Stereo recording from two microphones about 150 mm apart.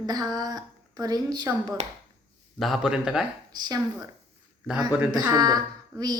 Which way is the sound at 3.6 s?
25° right (ahead or behind).